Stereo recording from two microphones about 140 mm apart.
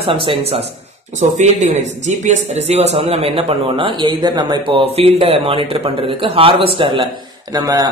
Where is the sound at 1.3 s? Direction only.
55° right (ahead or behind).